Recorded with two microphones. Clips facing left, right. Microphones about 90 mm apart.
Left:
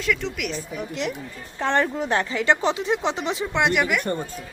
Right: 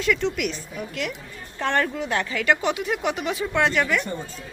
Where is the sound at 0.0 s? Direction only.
Centre (ahead or behind).